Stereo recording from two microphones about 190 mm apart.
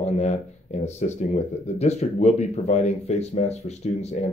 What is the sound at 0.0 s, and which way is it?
Speech, 35° left (ahead or behind).